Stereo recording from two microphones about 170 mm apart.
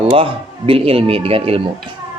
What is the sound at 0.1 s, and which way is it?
A man's voice, 35° right (ahead or behind).